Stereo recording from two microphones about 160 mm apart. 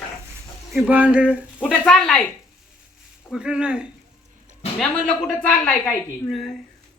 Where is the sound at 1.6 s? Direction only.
5° left (ahead or behind).